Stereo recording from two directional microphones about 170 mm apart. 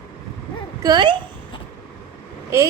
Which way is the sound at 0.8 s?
25° right (ahead or behind).